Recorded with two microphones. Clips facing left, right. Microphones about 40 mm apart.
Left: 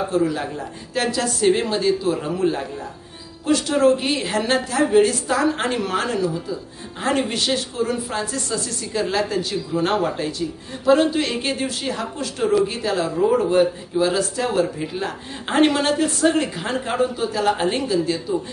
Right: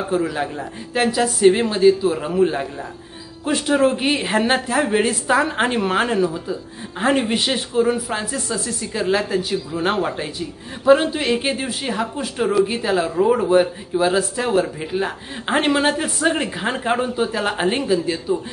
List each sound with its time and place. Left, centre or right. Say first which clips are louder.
0.1 s speech: even; right